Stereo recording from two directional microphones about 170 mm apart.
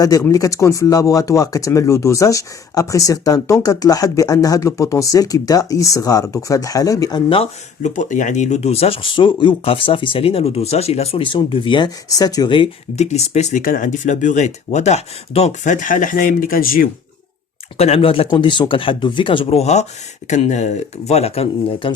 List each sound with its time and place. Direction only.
0.0 s speech: 20° left (ahead or behind)
7.3 s speech: 40° left (ahead or behind)
13.0 s speech: 40° left (ahead or behind); by 16.9 s 55° left (ahead or behind)
17.7 s speech: 35° left (ahead or behind)